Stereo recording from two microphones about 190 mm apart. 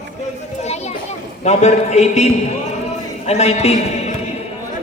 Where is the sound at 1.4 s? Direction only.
35° left (ahead or behind).